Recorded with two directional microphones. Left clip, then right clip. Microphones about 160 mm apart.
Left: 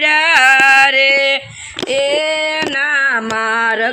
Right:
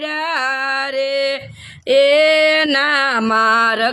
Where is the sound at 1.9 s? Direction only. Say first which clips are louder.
Right 4 dB; 40° right (ahead or behind).